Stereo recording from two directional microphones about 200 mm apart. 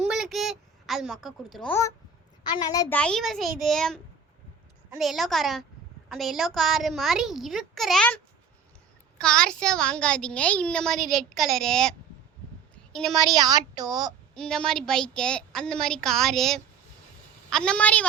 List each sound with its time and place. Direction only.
0.1 s a sound: centre (ahead or behind)
2.6 s a child's voice: 20° left (ahead or behind)
2.9 s a child's voice: 5° left (ahead or behind)
12.7 s a sound: centre (ahead or behind)
13.1 s a woman's voice: 20° right (ahead or behind)
14.3 s a child's voice: 5° left (ahead or behind)